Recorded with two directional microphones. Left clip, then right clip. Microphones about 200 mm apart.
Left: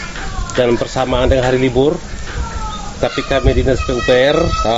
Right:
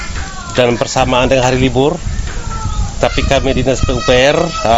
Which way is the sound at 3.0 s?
60° right (ahead or behind).